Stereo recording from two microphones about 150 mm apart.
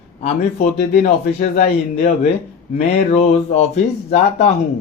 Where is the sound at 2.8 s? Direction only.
50° left (ahead or behind).